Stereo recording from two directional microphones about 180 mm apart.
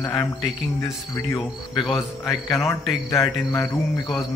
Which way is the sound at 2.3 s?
15° left (ahead or behind).